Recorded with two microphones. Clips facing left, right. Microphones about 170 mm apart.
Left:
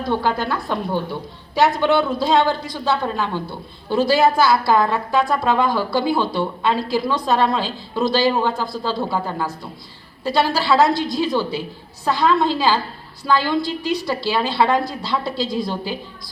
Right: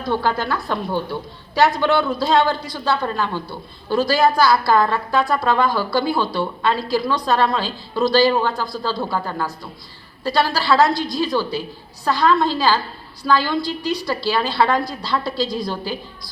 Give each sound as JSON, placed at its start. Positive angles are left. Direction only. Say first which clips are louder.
{"t": 0.0, "sound": "a man's voice", "louder": "even", "side_deg": 15}